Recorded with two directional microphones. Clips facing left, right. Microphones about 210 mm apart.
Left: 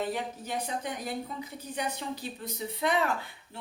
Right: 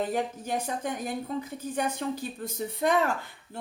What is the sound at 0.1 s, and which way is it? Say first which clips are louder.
Speech: right 4 dB; 50° right (ahead or behind).